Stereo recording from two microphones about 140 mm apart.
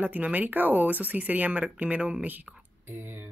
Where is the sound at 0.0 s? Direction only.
10° right (ahead or behind).